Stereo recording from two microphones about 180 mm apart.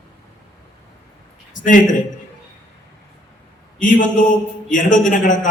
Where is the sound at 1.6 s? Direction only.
45° left (ahead or behind).